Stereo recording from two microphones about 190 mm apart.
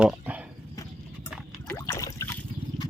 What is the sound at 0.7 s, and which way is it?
Clip-clop, 15° left (ahead or behind).